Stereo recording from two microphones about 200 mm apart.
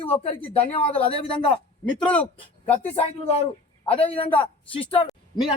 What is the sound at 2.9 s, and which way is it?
Speech, 30° left (ahead or behind).